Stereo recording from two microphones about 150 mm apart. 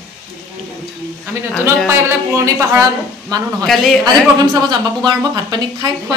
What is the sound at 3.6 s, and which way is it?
Speech, centre (ahead or behind).